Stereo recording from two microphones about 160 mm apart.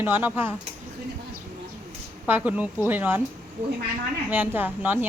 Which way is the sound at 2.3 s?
10° right (ahead or behind).